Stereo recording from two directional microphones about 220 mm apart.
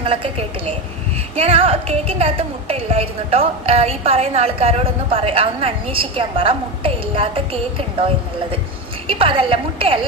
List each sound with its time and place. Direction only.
0.0 s a woman's voice: 25° right (ahead or behind)
9.0 s a woman's voice: 25° right (ahead or behind)